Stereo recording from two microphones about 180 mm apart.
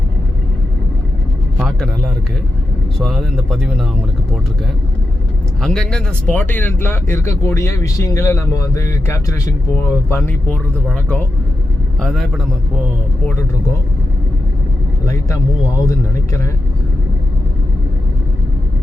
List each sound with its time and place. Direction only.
1.5 s speech: centre (ahead or behind)
5.6 s speech: 5° left (ahead or behind)
15.0 s speech: 15° left (ahead or behind)